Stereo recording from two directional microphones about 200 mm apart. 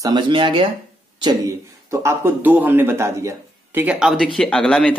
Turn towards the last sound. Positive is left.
turn(degrees=5)  # may be behind; listen again after turning